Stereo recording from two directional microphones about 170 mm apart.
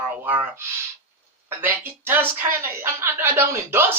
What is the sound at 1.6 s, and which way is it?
A woman's voice, 10° right (ahead or behind).